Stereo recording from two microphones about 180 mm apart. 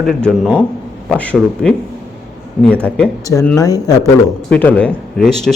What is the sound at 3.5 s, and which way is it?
Speech, 20° left (ahead or behind).